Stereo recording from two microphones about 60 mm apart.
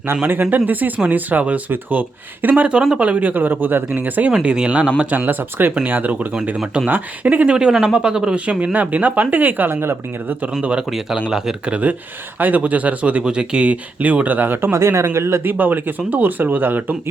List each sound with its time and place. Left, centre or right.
0.5 s speech: right
4.4 s speech: centre; by 10.5 s right
10.6 s speech: centre
10.8 s speech: centre
11.7 s speech: right
14.7 s speech: right
15.4 s speech: right